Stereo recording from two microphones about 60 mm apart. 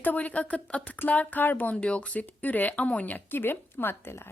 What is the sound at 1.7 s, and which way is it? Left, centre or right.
Speech, centre.